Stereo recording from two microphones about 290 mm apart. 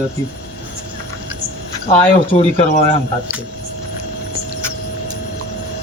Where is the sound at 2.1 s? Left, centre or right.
Left.